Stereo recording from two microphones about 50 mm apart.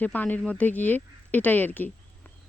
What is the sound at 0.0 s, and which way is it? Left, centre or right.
Speech, left.